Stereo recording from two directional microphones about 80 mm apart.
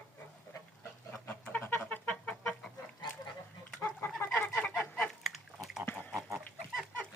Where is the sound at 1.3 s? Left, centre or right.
Left.